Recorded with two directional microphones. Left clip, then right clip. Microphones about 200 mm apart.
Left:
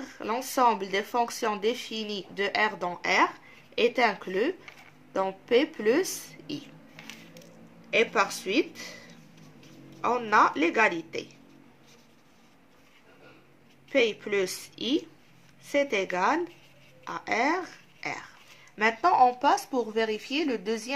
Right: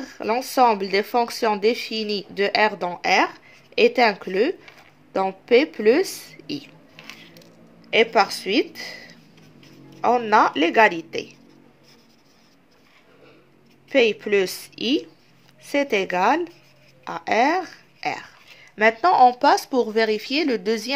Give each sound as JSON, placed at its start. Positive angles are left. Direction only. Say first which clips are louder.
{"t": 0.0, "sound": "speech", "louder": "right 8 dB", "side_deg": -30}
{"t": 7.9, "sound": "speech", "louder": "right 7 dB", "side_deg": -35}
{"t": 13.9, "sound": "speech", "louder": "right 7 dB", "side_deg": -35}